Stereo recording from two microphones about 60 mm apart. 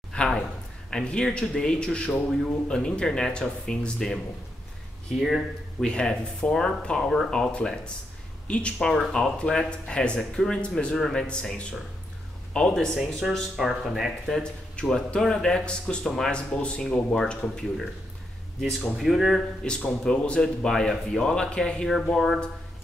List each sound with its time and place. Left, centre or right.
0.1 s a sound: centre
0.8 s a man's voice: centre
5.2 s speech: centre
5.9 s a man's voice: centre
12.7 s a man's voice: centre
13.6 s speech: centre
14.4 s a man's voice: centre
19.6 s a man's voice: centre